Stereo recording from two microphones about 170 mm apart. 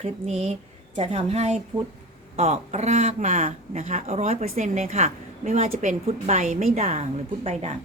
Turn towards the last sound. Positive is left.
turn(degrees=-40)  # may be behind; listen again after turning